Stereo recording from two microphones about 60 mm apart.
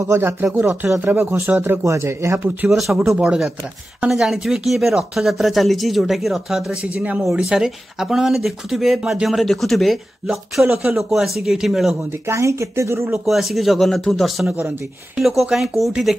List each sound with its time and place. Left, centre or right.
0.0 s speech: right
1.9 s speech: right
2.7 s speech: centre
6.7 s speech: right; by 12.0 s centre
12.3 s speech: right
13.1 s speech: centre